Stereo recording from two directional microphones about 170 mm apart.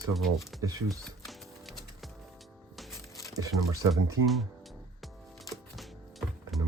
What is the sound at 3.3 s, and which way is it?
Speech, 20° right (ahead or behind).